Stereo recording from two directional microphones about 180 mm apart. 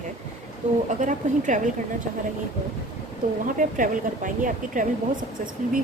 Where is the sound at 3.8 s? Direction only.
45° right (ahead or behind).